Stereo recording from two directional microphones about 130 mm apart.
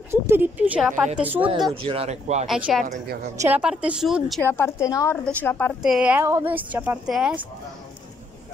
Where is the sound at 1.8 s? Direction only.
45° right (ahead or behind).